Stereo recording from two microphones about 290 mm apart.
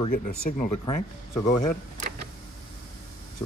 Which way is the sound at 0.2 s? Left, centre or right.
Left.